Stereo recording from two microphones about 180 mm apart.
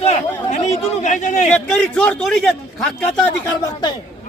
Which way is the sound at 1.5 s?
5° left (ahead or behind).